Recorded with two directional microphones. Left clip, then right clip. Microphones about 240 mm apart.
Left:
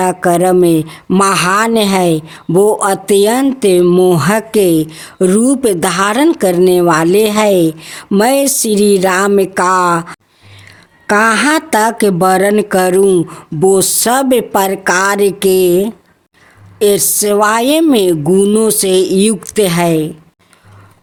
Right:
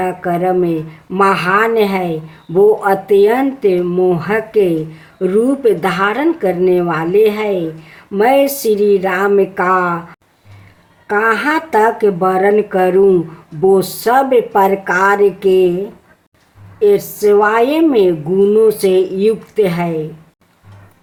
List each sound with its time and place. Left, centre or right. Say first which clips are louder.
0.0 s a woman's voice: left 5 dB; left